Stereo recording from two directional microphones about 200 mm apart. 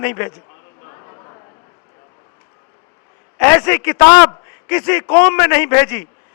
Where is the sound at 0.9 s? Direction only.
20° left (ahead or behind).